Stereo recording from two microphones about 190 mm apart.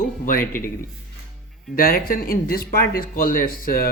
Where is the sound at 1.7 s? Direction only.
55° left (ahead or behind).